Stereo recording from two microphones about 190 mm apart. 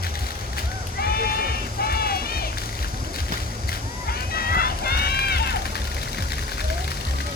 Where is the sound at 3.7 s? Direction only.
50° left (ahead or behind).